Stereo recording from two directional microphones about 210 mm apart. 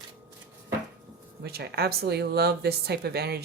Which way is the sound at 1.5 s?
50° right (ahead or behind).